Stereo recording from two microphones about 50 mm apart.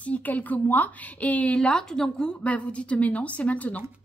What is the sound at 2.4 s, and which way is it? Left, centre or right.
A woman's voice, left.